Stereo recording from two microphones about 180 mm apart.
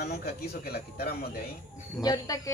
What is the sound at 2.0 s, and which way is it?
Speech, 20° left (ahead or behind).